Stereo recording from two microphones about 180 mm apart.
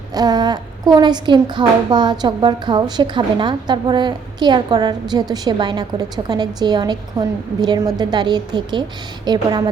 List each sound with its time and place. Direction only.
0.1 s a woman's voice: 20° right (ahead or behind)